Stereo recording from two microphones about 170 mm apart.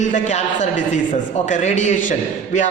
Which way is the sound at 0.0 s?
45° left (ahead or behind).